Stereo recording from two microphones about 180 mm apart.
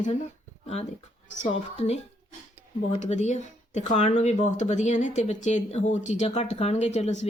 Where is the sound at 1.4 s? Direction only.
35° left (ahead or behind).